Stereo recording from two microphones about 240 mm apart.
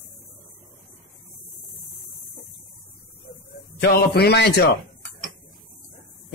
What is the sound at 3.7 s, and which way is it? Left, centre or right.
Speech, left.